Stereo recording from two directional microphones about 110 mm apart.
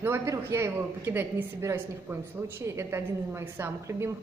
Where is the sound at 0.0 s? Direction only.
25° right (ahead or behind).